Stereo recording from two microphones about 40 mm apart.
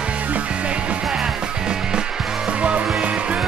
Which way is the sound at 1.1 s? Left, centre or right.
Centre.